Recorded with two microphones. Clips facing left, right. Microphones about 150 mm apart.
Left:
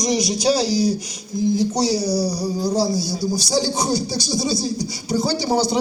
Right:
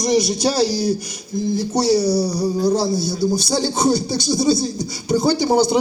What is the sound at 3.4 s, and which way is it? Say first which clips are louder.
Speech: right 1 dB; 55° right (ahead or behind).